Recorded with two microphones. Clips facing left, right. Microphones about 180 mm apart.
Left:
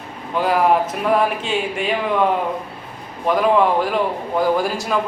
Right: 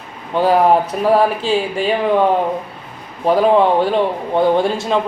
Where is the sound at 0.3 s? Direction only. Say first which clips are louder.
Right 4 dB; 30° right (ahead or behind).